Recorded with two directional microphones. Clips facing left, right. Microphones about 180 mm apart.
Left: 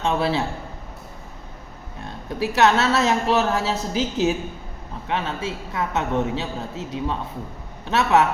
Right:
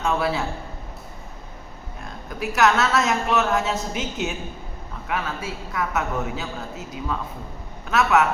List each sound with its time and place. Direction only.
0.0 s a man's voice: 30° left (ahead or behind)
2.6 s a man's voice: 30° left (ahead or behind)